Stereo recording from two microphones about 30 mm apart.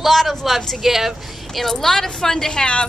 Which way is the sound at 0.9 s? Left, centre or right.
Centre.